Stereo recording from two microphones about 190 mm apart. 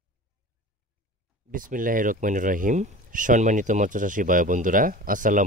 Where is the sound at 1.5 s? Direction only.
45° right (ahead or behind).